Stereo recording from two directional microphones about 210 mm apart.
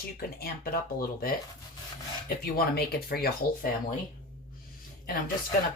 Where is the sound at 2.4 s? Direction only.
45° left (ahead or behind).